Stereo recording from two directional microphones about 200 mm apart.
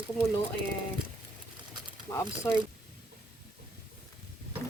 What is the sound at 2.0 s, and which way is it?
Speech, 15° left (ahead or behind).